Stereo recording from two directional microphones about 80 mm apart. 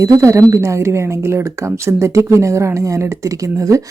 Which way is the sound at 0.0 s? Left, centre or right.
Right.